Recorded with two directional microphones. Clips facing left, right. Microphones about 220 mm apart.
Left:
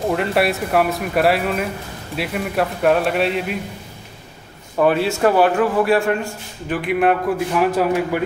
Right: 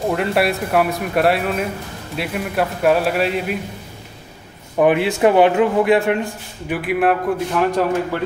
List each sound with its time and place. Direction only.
0.0 s speech: centre (ahead or behind)
4.7 s a man's voice: 15° right (ahead or behind)
6.8 s speech: centre (ahead or behind)